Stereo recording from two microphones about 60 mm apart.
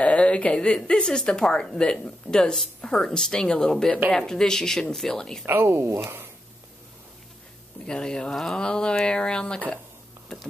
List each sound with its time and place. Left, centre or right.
0.0 s a woman's voice: left
5.4 s speech: right
5.9 s speech: right
7.8 s a woman's voice: centre